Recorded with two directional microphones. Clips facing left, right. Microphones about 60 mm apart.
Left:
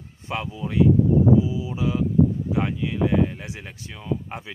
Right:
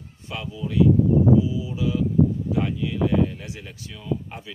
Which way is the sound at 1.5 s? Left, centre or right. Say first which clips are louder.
Even; left.